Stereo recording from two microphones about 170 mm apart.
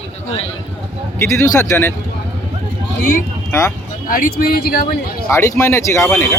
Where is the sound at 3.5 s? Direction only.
15° left (ahead or behind).